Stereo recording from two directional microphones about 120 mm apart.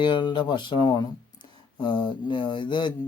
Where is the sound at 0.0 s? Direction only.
40° left (ahead or behind).